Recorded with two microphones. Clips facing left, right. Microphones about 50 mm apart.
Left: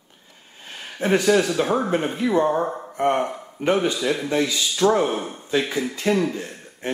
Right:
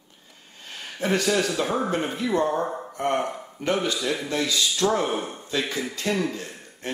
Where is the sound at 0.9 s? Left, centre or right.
Centre.